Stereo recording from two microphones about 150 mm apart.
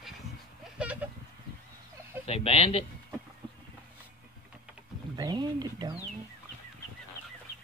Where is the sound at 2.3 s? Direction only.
40° left (ahead or behind).